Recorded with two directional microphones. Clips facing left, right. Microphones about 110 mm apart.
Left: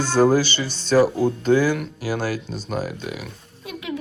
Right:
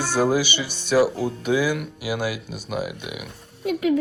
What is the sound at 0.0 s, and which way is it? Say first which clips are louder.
Speech: left 4 dB; 10° right (ahead or behind).